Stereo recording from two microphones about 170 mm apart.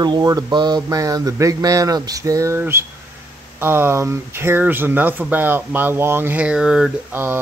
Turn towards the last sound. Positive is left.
turn(degrees=-10)  # may be behind; listen again after turning